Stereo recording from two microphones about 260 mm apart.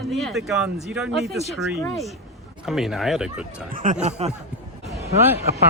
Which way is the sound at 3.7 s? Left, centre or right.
Right.